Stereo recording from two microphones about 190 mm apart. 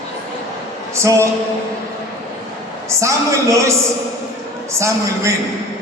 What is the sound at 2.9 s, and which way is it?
A man's voice, 15° right (ahead or behind).